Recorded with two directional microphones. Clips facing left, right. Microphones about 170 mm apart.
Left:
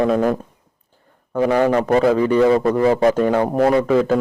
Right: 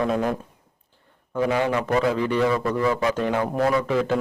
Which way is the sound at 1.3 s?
45° left (ahead or behind).